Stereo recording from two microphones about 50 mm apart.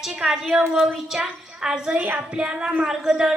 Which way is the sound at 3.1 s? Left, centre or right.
Centre.